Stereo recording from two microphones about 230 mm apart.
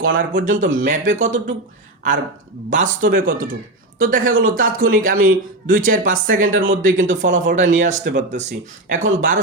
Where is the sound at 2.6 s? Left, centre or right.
Right.